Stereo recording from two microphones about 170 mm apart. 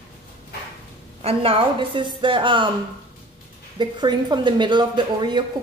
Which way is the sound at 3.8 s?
25° right (ahead or behind).